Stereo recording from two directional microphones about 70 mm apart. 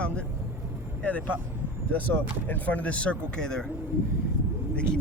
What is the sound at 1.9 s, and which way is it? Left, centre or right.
Speech, left.